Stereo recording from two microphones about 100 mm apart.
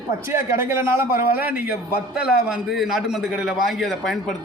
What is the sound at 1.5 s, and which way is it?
Speech, 15° right (ahead or behind).